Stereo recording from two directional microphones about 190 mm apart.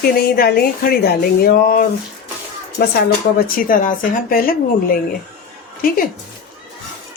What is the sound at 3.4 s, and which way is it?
Speech, 45° left (ahead or behind).